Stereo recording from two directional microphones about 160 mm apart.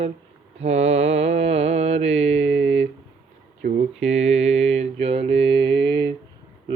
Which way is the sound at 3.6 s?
50° right (ahead or behind).